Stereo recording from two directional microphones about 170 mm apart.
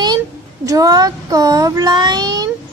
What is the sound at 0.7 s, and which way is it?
Child singing, 20° right (ahead or behind).